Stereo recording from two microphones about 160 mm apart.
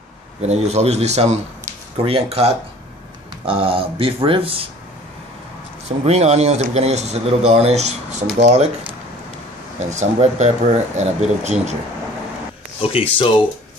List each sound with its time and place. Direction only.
0.4 s speech: 40° right (ahead or behind)
5.9 s speech: 40° right (ahead or behind)
9.8 s speech: 50° right (ahead or behind)
12.8 s speech: 35° left (ahead or behind)